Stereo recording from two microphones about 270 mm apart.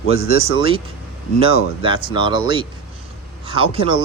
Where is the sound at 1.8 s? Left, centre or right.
Centre.